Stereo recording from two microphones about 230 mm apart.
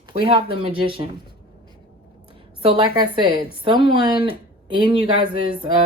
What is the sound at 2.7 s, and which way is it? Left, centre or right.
Speech, right.